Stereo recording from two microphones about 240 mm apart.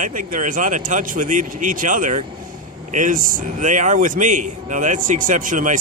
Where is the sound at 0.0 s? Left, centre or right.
Right.